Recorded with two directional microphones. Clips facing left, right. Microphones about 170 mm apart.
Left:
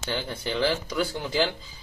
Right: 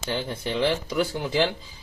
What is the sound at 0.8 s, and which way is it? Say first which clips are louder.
Speech: right 3 dB; 5° right (ahead or behind).